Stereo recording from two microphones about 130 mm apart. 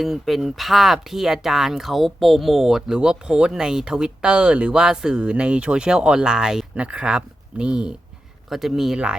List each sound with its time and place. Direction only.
0.0 s speech: centre (ahead or behind)